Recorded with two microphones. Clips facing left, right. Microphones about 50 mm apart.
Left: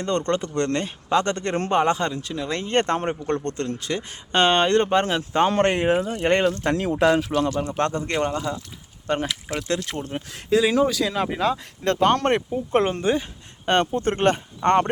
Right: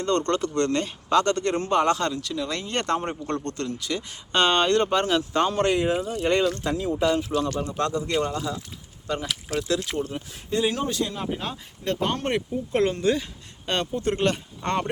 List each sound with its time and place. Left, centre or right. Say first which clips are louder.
0.0 s speech: even; left
5.5 s speech: left 3 dB; left
6.7 s speech: left 4 dB; left
7.6 s speech: left 2 dB; left
10.5 s speech: left 6 dB; left
12.5 s speech: left 2 dB; left
13.7 s speech: left 5 dB; left